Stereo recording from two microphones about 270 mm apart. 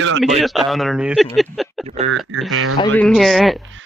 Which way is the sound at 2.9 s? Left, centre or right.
Centre.